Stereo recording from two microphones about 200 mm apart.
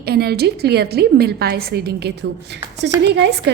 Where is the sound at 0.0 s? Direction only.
50° right (ahead or behind).